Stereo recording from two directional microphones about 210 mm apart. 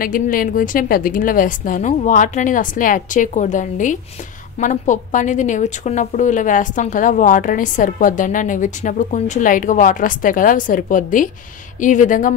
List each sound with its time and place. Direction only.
0.0 s a woman's voice: 40° left (ahead or behind)